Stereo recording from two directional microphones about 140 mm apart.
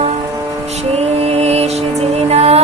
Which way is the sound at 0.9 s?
45° right (ahead or behind).